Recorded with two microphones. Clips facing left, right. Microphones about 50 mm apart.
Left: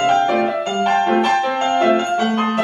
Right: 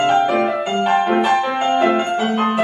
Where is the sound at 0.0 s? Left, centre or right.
Centre.